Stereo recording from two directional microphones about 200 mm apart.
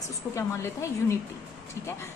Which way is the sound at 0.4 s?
15° left (ahead or behind).